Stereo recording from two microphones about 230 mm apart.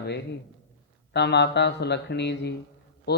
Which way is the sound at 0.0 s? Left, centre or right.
Left.